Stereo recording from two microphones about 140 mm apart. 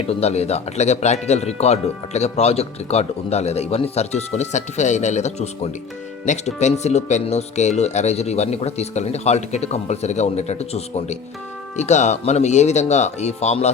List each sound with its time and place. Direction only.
0.1 s speech: 50° left (ahead or behind)